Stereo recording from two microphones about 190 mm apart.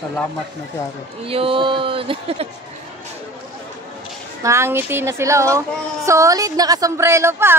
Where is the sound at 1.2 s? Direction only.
30° right (ahead or behind).